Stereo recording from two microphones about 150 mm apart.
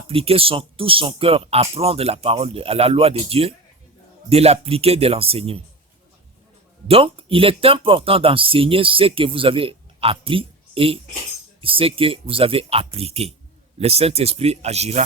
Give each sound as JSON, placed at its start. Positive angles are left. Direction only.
{"t": 0.1, "sound": "speech", "side_deg": -40}
{"t": 6.8, "sound": "speech", "side_deg": -40}